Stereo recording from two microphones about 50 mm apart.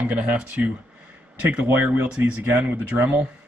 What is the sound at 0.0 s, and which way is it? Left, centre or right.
Speech, right.